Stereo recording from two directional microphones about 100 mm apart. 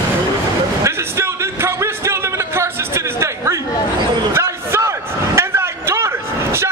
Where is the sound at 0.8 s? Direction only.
25° right (ahead or behind).